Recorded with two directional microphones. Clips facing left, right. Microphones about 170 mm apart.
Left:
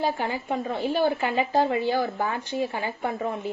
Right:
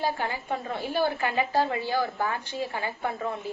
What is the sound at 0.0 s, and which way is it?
A woman's voice, 20° left (ahead or behind).